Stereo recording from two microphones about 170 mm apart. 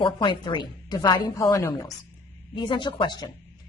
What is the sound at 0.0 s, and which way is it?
A woman's voice, 30° left (ahead or behind).